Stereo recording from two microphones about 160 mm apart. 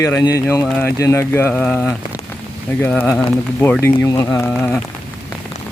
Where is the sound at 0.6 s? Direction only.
5° left (ahead or behind).